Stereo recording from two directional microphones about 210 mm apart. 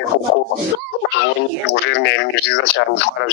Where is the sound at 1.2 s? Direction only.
55° left (ahead or behind).